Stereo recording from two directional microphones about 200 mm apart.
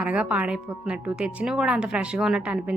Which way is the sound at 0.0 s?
5° right (ahead or behind).